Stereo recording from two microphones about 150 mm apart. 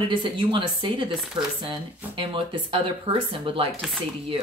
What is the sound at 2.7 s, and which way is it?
Speech, 35° right (ahead or behind).